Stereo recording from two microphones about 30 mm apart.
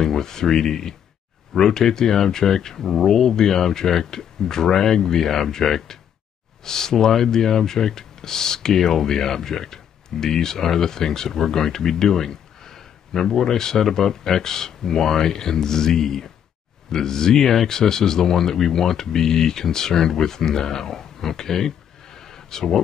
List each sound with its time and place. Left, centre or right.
0.0 s speech: centre